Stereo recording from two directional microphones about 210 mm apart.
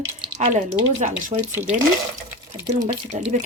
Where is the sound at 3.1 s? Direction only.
35° right (ahead or behind).